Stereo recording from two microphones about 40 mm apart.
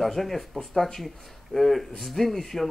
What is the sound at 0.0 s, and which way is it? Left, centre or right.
Speech, centre.